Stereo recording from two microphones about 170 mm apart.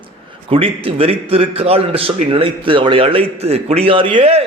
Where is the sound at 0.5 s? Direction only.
35° right (ahead or behind).